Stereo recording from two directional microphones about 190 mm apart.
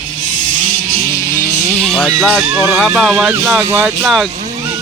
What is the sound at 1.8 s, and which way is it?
Speech, centre (ahead or behind).